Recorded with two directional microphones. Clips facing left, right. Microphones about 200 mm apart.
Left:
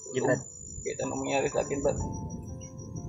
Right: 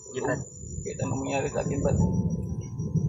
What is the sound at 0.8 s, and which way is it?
Speech, 5° left (ahead or behind).